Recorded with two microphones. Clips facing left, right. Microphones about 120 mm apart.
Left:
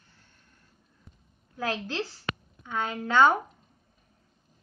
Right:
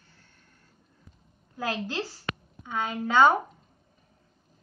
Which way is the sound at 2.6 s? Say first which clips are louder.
Right 1 dB; 10° right (ahead or behind).